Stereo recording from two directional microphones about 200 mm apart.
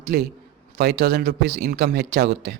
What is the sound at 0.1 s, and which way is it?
A man's voice, 50° right (ahead or behind).